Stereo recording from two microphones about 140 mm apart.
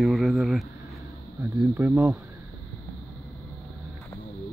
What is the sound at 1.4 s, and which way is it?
Speech, 15° right (ahead or behind).